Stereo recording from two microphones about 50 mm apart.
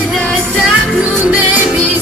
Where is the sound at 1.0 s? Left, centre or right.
Right.